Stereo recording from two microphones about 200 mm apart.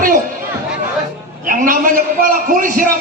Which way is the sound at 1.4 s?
45° right (ahead or behind).